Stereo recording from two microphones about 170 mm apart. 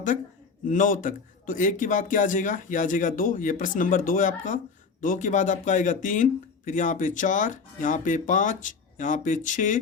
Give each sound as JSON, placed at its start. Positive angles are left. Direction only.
{"t": 0.7, "sound": "speech", "side_deg": 50}